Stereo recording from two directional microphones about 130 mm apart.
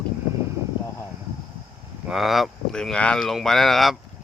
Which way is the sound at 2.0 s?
Centre (ahead or behind).